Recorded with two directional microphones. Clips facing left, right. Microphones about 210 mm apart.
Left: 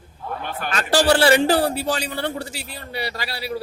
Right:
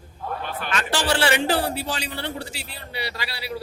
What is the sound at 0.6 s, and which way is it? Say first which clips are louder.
A man's voice: left 7 dB; 40° left (ahead or behind).